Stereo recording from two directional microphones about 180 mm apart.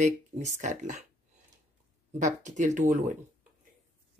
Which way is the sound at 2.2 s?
45° right (ahead or behind).